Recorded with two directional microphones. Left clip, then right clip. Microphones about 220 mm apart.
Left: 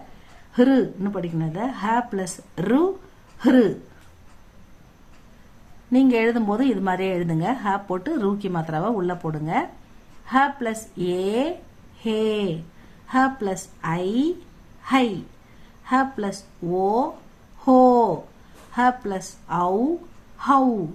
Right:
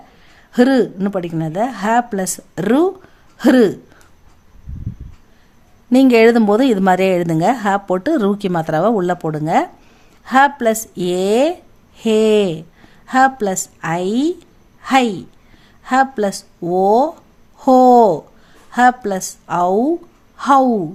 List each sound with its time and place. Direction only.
0.5 s a woman's voice: 45° right (ahead or behind)
5.9 s a woman's voice: 45° right (ahead or behind)